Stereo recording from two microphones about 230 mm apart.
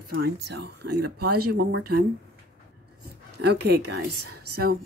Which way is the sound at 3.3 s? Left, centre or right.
Right.